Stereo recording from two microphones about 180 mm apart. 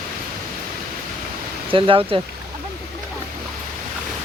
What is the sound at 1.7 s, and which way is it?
Speech, 30° right (ahead or behind).